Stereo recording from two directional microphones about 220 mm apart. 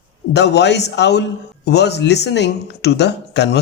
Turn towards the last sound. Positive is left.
turn(degrees=50)  # may be behind; listen again after turning